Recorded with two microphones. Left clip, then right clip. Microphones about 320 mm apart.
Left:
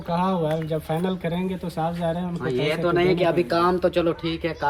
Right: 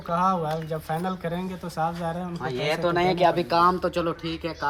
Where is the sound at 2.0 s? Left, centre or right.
Right.